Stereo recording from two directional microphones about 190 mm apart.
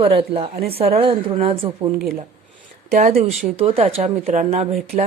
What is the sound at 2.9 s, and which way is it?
Speech, 45° right (ahead or behind).